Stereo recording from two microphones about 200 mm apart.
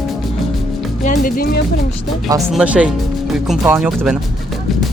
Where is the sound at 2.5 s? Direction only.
5° right (ahead or behind).